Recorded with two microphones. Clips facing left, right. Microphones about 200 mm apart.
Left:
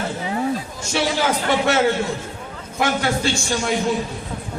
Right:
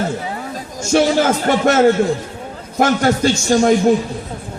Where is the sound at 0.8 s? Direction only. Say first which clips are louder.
Right 11 dB; 45° right (ahead or behind).